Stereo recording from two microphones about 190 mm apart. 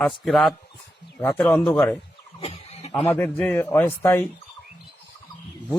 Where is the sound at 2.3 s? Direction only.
30° left (ahead or behind).